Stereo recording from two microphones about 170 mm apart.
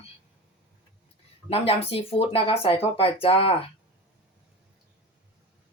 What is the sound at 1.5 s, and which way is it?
Speech, 35° left (ahead or behind).